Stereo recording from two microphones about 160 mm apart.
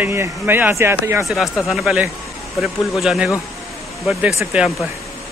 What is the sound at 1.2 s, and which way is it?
Speech, centre (ahead or behind).